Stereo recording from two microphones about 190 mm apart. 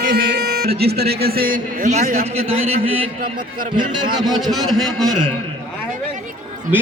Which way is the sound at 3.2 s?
45° right (ahead or behind).